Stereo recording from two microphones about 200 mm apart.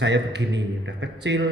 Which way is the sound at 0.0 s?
60° right (ahead or behind).